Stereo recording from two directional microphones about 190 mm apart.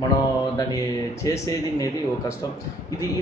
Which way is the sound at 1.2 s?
20° left (ahead or behind).